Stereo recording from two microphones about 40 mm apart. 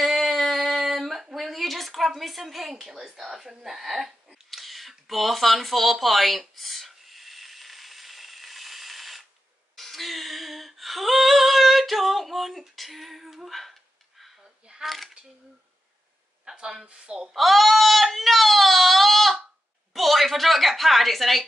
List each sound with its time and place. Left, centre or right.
0.0 s a sound: centre
9.8 s humming: centre
14.8 s speech: centre
16.8 s speech: right
17.3 s speech: centre